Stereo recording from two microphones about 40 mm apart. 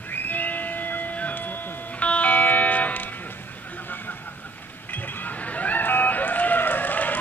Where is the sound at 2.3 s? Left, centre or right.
Left.